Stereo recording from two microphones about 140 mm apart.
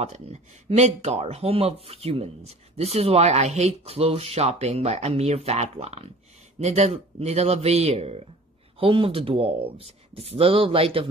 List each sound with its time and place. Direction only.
0.0 s speech: 50° right (ahead or behind)